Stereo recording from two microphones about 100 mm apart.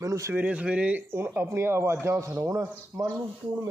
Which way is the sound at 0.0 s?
30° right (ahead or behind).